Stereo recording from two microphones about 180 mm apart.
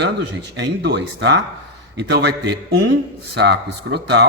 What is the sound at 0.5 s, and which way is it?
A man's voice, 70° right (ahead or behind).